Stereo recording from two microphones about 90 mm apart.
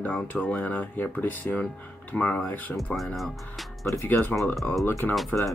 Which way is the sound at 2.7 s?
Centre (ahead or behind).